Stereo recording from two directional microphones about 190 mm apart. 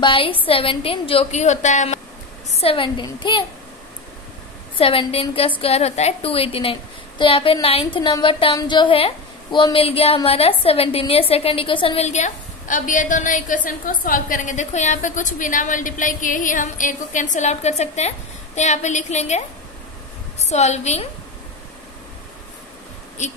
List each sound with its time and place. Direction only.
0.0 s a woman's voice: 25° left (ahead or behind)
4.7 s a woman's voice: 30° left (ahead or behind)
23.2 s a woman's voice: 40° left (ahead or behind)